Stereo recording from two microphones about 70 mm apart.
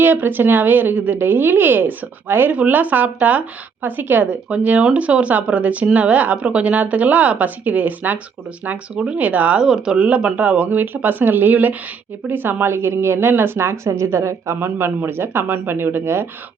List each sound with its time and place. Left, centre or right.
0.0 s a woman's voice: right
9.6 s a woman's voice: centre; by 16.2 s right